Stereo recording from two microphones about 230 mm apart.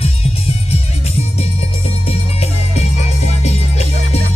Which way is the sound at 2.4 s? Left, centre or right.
Left.